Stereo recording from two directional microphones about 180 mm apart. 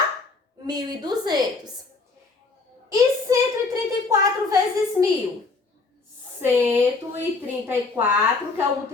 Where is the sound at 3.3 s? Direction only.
20° right (ahead or behind).